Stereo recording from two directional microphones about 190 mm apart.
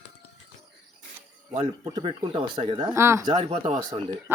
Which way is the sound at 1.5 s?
30° right (ahead or behind).